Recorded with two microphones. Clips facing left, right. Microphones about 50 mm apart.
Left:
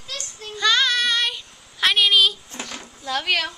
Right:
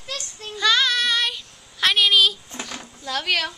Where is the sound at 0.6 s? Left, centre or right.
Centre.